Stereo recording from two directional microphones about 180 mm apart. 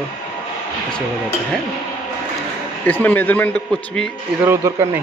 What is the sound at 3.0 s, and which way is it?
Speech, 10° left (ahead or behind).